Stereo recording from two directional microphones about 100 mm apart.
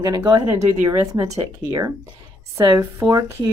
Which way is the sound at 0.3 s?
40° right (ahead or behind).